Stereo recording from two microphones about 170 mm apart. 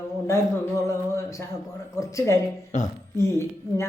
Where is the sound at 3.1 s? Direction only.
15° left (ahead or behind).